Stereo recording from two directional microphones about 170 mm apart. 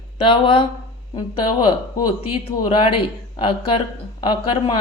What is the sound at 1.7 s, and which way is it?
Speech, 25° left (ahead or behind).